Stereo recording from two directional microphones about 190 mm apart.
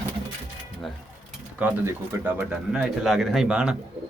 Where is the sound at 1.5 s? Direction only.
10° right (ahead or behind).